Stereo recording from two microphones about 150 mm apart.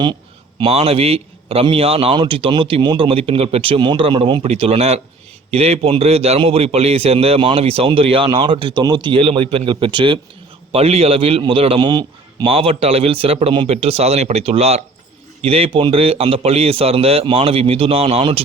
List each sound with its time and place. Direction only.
0.6 s a man's voice: 40° right (ahead or behind)